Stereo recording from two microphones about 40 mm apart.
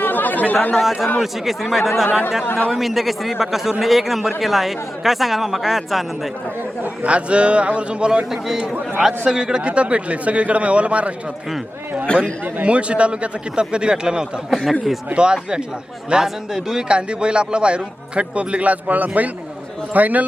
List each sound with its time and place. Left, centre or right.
0.0 s chatter: left
1.2 s a man's voice: centre
2.4 s a man's voice: left
2.7 s a man's voice: centre
7.0 s a man's voice: right
8.3 s a man's voice: centre; by 11.1 s right
12.0 s a man's voice: left
12.6 s a man's voice: right
16.2 s a man's voice: centre
16.9 s a man's voice: right